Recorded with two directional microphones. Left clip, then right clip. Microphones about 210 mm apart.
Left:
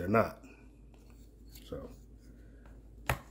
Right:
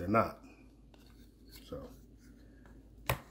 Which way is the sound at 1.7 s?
15° left (ahead or behind).